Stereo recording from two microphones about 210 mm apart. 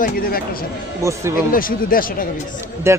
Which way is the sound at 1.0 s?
15° right (ahead or behind).